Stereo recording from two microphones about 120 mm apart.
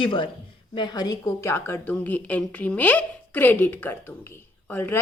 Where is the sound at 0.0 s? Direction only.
45° left (ahead or behind).